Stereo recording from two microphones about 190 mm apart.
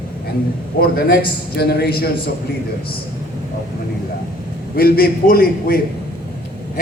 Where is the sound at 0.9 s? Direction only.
55° left (ahead or behind).